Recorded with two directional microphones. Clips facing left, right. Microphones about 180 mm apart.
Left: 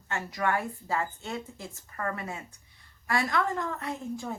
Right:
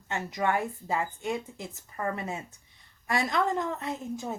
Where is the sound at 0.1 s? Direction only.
20° right (ahead or behind).